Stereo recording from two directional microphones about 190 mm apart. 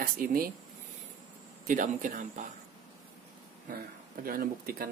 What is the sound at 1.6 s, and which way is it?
Speech, 45° right (ahead or behind).